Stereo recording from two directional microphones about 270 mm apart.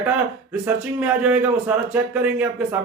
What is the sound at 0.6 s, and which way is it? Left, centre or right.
Speech, centre.